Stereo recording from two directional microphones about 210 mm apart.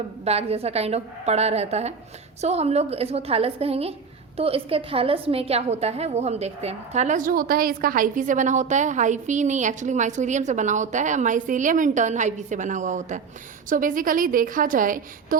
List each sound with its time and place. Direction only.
0.3 s a woman's voice: 30° right (ahead or behind)